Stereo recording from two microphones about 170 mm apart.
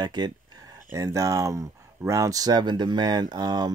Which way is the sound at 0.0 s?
25° right (ahead or behind).